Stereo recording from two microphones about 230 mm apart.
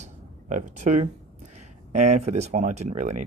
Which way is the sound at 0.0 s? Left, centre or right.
Right.